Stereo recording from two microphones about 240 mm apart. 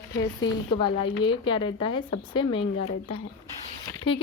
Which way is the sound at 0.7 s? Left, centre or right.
Centre.